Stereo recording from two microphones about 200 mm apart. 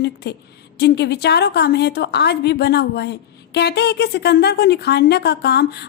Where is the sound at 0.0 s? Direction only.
55° left (ahead or behind).